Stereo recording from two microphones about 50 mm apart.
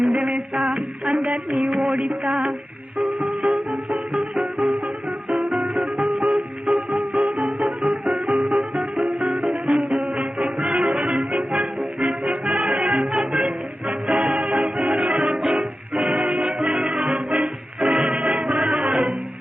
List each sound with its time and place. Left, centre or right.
0.0 s music: right